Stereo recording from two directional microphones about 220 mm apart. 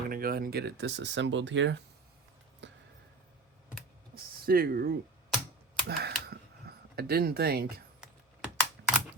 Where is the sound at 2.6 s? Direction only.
55° right (ahead or behind).